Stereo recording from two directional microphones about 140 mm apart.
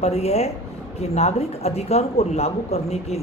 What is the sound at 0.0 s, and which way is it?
Speech, 50° left (ahead or behind).